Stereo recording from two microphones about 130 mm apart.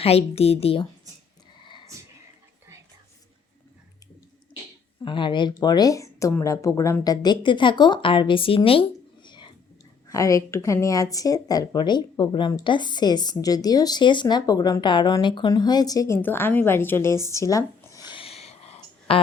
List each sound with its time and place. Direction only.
0.0 s a woman's voice: 50° left (ahead or behind)
1.6 s a sound: 35° left (ahead or behind)
5.0 s speech: 40° left (ahead or behind)
9.2 s whispering: 35° left (ahead or behind)
10.1 s speech: 25° left (ahead or behind)
18.0 s a sound: 40° left (ahead or behind)